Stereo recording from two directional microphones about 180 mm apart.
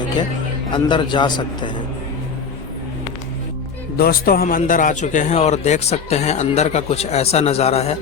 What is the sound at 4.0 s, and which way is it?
Speech, 55° left (ahead or behind).